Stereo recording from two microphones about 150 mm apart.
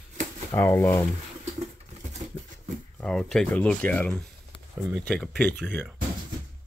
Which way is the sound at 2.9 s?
5° left (ahead or behind).